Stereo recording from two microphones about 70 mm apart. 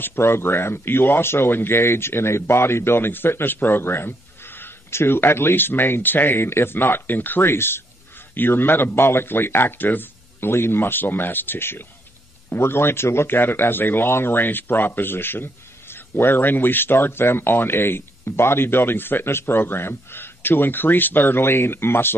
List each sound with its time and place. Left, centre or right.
0.0 s a man's voice: left